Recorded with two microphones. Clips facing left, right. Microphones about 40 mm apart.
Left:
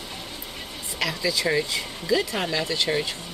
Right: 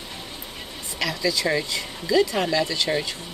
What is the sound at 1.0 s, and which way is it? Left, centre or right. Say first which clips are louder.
Speech: right 1 dB; centre.